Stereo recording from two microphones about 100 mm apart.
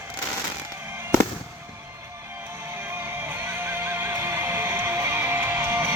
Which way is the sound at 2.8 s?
20° right (ahead or behind).